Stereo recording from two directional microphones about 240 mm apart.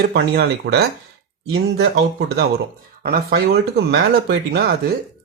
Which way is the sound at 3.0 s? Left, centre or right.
Right.